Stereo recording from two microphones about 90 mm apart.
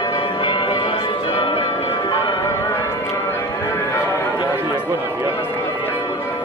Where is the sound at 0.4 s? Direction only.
65° left (ahead or behind).